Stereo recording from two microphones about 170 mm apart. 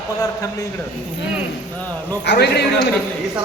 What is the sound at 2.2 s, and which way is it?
Speech, 75° left (ahead or behind).